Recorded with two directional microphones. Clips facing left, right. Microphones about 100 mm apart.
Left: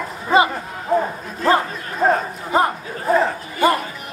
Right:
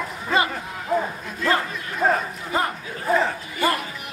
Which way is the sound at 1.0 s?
30° left (ahead or behind).